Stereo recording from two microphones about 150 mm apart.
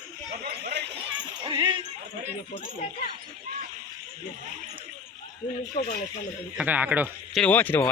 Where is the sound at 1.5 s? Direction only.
30° right (ahead or behind).